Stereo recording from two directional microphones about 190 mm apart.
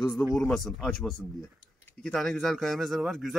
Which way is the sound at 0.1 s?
Centre (ahead or behind).